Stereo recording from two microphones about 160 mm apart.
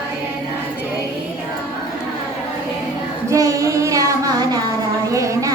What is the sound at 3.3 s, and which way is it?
Child singing, 20° right (ahead or behind).